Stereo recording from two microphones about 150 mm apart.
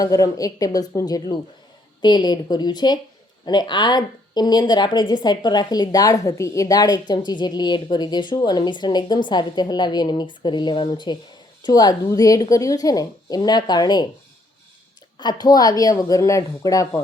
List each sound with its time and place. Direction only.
0.0 s speech: 25° left (ahead or behind)
15.2 s speech: 30° left (ahead or behind)